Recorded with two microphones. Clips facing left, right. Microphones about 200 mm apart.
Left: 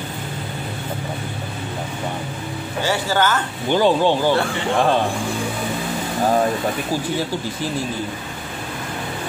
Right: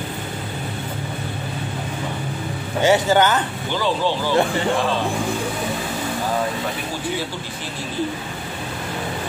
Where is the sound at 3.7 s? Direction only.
50° left (ahead or behind).